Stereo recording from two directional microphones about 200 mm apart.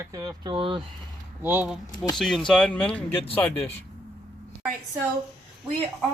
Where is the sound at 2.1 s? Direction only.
Centre (ahead or behind).